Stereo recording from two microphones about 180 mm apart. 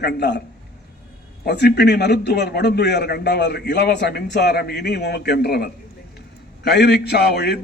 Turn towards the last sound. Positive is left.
turn(degrees=65)  # may be behind; listen again after turning